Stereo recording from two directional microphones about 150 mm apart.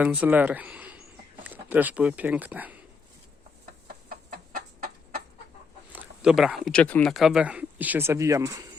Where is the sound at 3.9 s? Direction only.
80° right.